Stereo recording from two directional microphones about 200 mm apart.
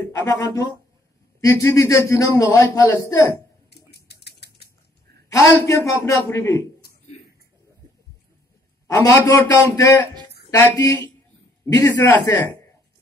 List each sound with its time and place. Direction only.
0.2 s a man's voice: 15° left (ahead or behind)
3.7 s typewriter: 55° left (ahead or behind)
5.3 s a man's voice: 15° left (ahead or behind)
8.8 s a man's voice: 15° left (ahead or behind)